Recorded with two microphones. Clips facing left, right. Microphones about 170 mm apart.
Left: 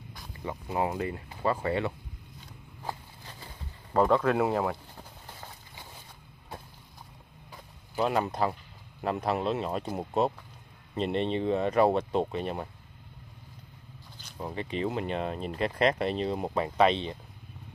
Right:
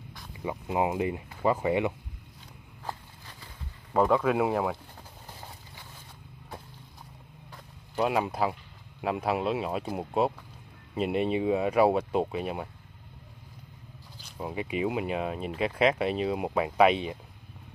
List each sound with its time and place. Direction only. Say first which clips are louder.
0.3 s speech: right 3 dB; 10° right (ahead or behind)
3.9 s speech: even; 5° right (ahead or behind)
7.5 s a sound: right 1 dB; centre (ahead or behind)
9.0 s speech: right 1 dB; 5° right (ahead or behind)
14.2 s speech: right 2 dB; 10° right (ahead or behind)